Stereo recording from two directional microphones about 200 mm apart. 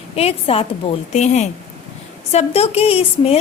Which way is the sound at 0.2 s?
30° left (ahead or behind).